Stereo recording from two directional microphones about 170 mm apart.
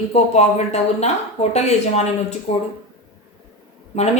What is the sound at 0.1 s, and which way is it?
A woman's voice, 40° left (ahead or behind).